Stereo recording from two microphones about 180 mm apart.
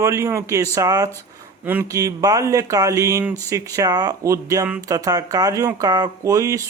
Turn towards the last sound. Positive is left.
turn(degrees=-15)  # may be behind; listen again after turning